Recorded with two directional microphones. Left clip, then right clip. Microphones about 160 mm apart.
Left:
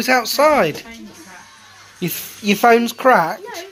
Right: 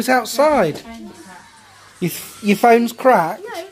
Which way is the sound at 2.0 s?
15° right (ahead or behind).